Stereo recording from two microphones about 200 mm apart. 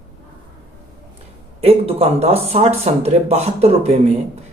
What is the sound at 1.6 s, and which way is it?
Speech, 30° right (ahead or behind).